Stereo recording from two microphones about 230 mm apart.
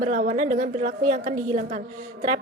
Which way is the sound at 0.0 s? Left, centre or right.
Right.